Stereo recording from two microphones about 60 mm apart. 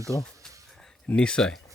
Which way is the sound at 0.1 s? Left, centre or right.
Left.